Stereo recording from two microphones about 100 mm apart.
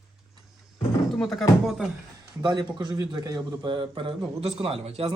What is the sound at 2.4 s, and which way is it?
A man's voice, 50° right (ahead or behind).